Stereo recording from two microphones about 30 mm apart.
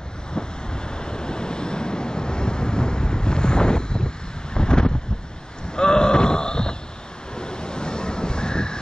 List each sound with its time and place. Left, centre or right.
0.3 s vehicle: left
4.6 s wind: left
5.7 s a sound: left
7.3 s vehicle: left